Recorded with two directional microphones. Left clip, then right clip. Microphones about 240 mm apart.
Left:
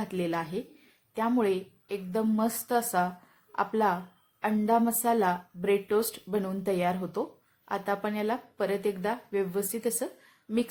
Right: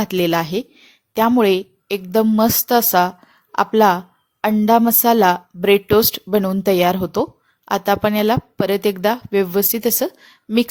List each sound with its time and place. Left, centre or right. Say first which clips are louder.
0.0 s a woman's voice: right 13 dB; right